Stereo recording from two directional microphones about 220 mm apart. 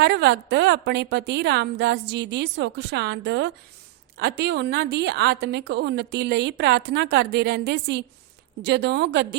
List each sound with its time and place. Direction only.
0.0 s a woman's voice: 50° right (ahead or behind)